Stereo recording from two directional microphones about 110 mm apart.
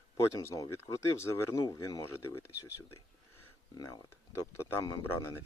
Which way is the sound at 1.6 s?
35° left (ahead or behind).